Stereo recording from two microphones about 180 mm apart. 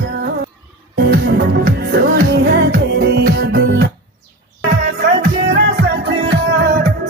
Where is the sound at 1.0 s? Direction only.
60° right (ahead or behind).